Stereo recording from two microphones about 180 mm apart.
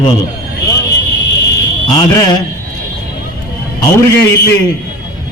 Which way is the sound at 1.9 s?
25° left (ahead or behind).